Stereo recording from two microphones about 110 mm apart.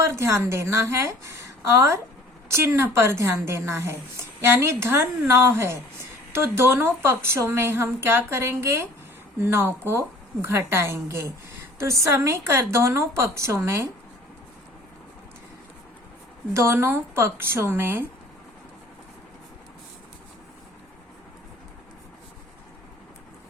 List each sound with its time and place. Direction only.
0.0 s a woman's voice: 25° right (ahead or behind)
16.6 s a woman's voice: 20° right (ahead or behind)